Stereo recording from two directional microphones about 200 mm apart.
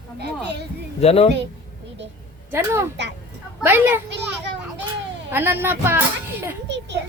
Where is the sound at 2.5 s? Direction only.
10° right (ahead or behind).